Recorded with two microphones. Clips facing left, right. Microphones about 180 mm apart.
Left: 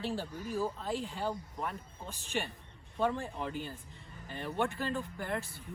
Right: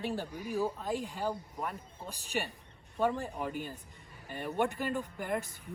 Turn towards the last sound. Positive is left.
turn(degrees=-15)  # may be behind; listen again after turning